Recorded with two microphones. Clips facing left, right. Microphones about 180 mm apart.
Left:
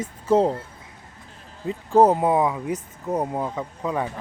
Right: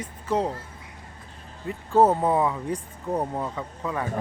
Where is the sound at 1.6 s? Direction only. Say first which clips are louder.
Left 3 dB; 15° left (ahead or behind).